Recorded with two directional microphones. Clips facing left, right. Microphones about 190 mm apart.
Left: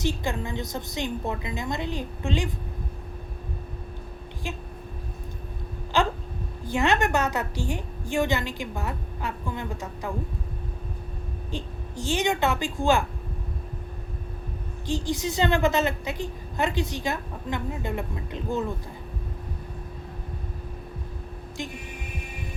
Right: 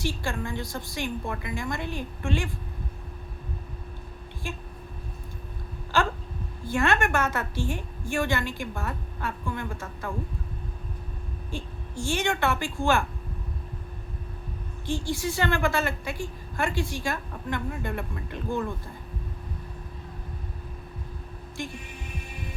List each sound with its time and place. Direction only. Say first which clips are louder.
0.0 s a woman's voice: left 2 dB; 20° left (ahead or behind)
4.4 s a woman's voice: left 2 dB; 20° left (ahead or behind)
5.9 s a sound: left 2 dB; 15° left (ahead or behind)
6.7 s a woman's voice: left 1 dB; 20° left (ahead or behind)
11.5 s a woman's voice: left 1 dB; 15° left (ahead or behind)
14.8 s a woman's voice: left 1 dB; 15° left (ahead or behind)
21.6 s a woman's voice: even; 15° left (ahead or behind)